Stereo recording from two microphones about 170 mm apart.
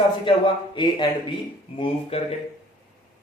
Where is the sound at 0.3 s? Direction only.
30° left (ahead or behind).